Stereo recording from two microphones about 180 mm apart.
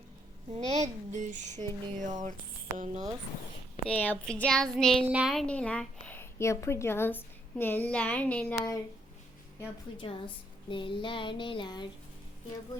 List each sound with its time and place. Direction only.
0.5 s speech: 40° right (ahead or behind)
3.8 s a woman's voice: 10° left (ahead or behind)
10.0 s a sound: 30° left (ahead or behind)